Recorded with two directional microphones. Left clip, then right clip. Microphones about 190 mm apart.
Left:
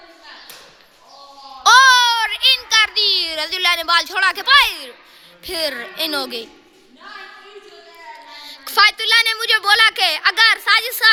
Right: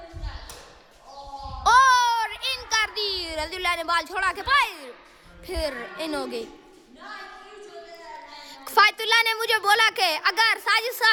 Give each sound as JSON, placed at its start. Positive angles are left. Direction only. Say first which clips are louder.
{"t": 1.6, "sound": "child singing", "louder": "left 7 dB", "side_deg": -5}
{"t": 5.4, "sound": "speech", "louder": "left 6 dB", "side_deg": 0}
{"t": 8.4, "sound": "a woman's voice", "louder": "left 5 dB", "side_deg": -20}